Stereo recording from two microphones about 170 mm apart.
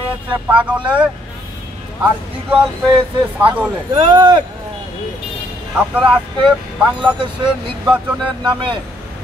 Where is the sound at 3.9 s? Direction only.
25° right (ahead or behind).